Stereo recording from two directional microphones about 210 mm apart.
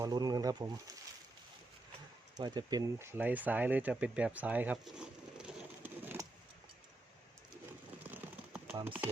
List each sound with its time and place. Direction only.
0.0 s speech: 20° right (ahead or behind)
2.4 s speech: 20° right (ahead or behind)
8.1 s a sound: 5° right (ahead or behind)
8.8 s speech: 10° right (ahead or behind)